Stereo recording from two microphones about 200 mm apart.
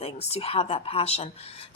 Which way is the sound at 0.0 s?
30° left (ahead or behind).